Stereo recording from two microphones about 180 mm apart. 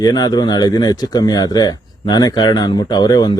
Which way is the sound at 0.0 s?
20° left (ahead or behind).